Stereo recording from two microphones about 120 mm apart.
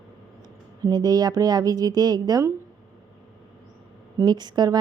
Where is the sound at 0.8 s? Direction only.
35° right (ahead or behind).